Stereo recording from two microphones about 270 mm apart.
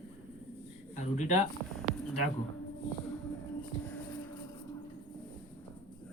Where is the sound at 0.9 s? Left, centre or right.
Left.